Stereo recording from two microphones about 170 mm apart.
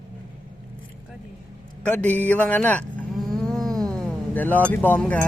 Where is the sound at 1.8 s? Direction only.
10° left (ahead or behind).